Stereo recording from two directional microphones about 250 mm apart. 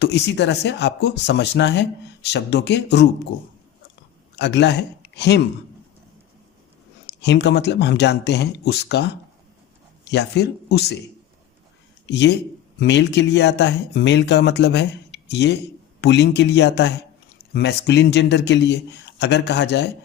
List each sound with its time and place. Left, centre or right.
0.0 s speech: left
7.2 s speech: left
12.0 s speech: left